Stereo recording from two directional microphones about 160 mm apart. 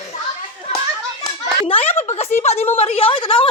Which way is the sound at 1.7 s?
40° left (ahead or behind).